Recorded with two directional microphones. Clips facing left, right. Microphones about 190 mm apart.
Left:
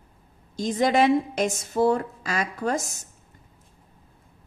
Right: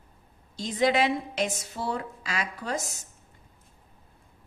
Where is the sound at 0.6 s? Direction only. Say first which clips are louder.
Left 3 dB; 45° left (ahead or behind).